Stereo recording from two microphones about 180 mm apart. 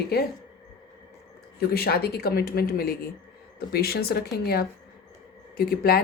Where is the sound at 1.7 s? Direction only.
60° left (ahead or behind).